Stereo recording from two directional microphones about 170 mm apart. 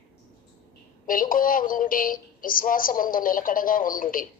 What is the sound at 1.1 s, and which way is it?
Speech, 55° left (ahead or behind).